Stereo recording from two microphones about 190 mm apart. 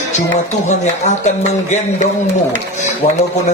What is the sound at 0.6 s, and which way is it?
Speech, 40° left (ahead or behind).